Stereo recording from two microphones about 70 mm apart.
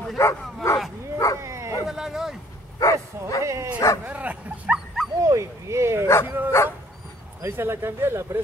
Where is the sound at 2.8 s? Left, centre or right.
Left.